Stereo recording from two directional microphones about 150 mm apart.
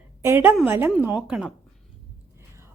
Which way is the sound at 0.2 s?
15° right (ahead or behind).